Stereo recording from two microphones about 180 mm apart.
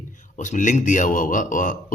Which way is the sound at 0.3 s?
45° left (ahead or behind).